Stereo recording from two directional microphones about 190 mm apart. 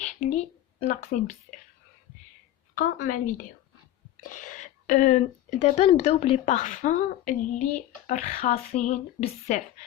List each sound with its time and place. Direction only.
0.0 s speech: 40° left (ahead or behind)
2.7 s a woman's voice: 45° left (ahead or behind)